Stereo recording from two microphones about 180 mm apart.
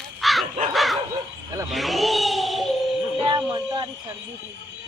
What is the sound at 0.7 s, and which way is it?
Dog, centre (ahead or behind).